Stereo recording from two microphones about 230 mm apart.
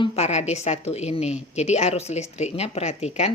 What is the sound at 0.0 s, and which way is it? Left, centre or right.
Speech, left.